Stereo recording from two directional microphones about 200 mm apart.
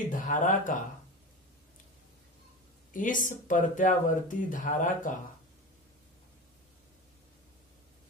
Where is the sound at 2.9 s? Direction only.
40° left (ahead or behind).